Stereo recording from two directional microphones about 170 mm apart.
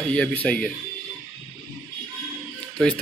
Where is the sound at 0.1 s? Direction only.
10° left (ahead or behind).